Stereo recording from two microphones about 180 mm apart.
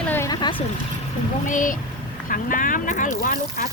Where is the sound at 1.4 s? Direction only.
45° left (ahead or behind).